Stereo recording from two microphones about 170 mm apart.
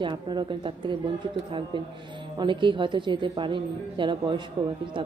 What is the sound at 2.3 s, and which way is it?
A woman's voice, 30° right (ahead or behind).